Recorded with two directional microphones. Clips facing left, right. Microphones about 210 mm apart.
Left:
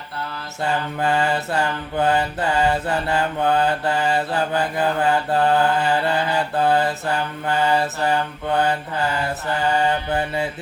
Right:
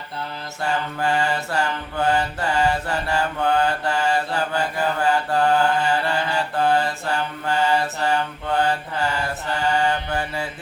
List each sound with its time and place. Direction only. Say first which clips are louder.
0.6 s mantra: left 2 dB; 20° left (ahead or behind)
9.7 s mantra: left 2 dB; 20° left (ahead or behind)